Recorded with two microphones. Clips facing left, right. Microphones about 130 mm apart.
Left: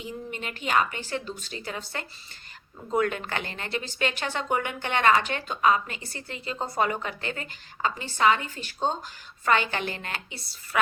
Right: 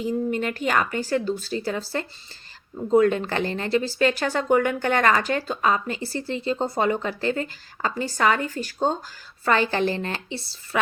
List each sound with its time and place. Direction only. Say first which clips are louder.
0.0 s speech: right 11 dB; 45° right (ahead or behind)
2.9 s speech: right 8 dB; 35° right (ahead or behind)